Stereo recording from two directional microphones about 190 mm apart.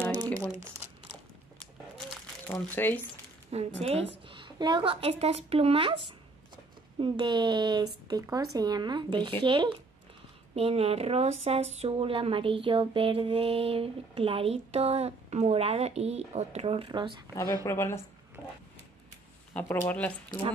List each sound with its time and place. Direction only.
2.4 s speech: 10° left (ahead or behind)
3.5 s a sound: 35° right (ahead or behind)
4.3 s speech: 25° right (ahead or behind)
10.5 s a sound: 30° right (ahead or behind)
17.6 s speech: 15° left (ahead or behind)
19.5 s speech: 10° left (ahead or behind)